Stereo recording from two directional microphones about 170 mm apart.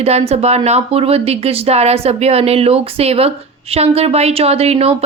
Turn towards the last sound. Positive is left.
turn(degrees=-35)  # may be behind; listen again after turning